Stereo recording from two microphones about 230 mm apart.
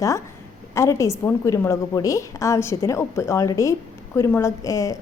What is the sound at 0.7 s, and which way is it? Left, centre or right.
A woman's voice, centre.